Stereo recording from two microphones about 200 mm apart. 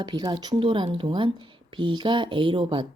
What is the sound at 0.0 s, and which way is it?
Speech, 20° right (ahead or behind).